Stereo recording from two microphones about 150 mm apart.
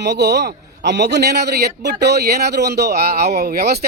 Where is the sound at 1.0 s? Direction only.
90° right.